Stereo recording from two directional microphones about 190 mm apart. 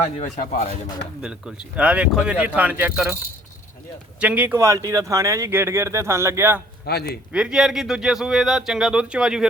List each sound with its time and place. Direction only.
0.2 s speech: 40° left (ahead or behind)
1.2 s speech: 5° right (ahead or behind)
4.2 s speech: 5° right (ahead or behind)
6.8 s speech: 55° left (ahead or behind)
7.3 s speech: 5° right (ahead or behind)